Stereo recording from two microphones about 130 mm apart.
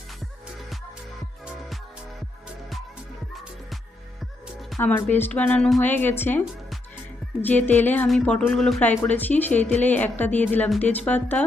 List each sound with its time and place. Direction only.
4.8 s speech: 15° left (ahead or behind)
7.4 s speech: 15° left (ahead or behind)
8.0 s speech: 5° left (ahead or behind)